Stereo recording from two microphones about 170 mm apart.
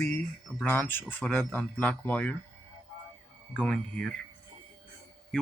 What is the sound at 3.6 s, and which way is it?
Speech, 5° left (ahead or behind).